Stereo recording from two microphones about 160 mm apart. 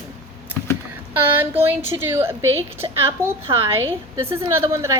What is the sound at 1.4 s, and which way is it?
A woman's voice, 15° right (ahead or behind).